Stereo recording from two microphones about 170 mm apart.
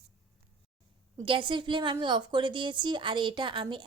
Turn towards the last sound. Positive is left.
turn(degrees=-30)  # may be behind; listen again after turning